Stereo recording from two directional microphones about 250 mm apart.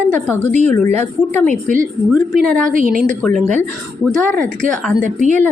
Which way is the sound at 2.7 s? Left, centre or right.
Right.